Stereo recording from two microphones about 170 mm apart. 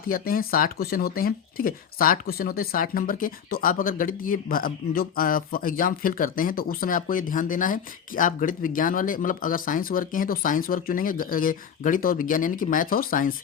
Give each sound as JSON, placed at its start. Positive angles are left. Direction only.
{"t": 0.1, "sound": "speech", "side_deg": 60}